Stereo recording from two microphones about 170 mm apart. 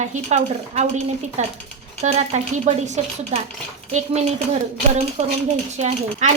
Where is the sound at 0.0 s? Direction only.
45° right (ahead or behind).